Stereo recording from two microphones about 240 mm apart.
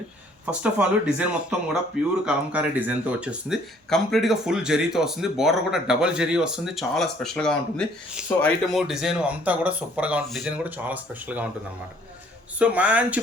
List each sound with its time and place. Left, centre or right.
0.6 s speech: centre
12.5 s speech: centre